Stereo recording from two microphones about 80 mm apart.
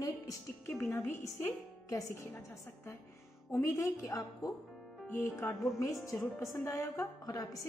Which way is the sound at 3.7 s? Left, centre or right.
Left.